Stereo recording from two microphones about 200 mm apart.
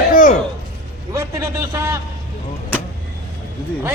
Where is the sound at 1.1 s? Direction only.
15° right (ahead or behind).